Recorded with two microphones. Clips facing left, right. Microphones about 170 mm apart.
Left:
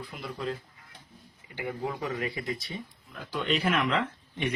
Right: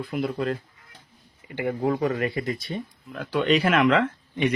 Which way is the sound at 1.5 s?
60° right (ahead or behind).